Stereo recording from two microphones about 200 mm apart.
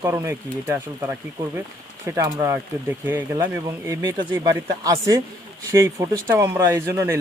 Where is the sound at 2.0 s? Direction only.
15° right (ahead or behind).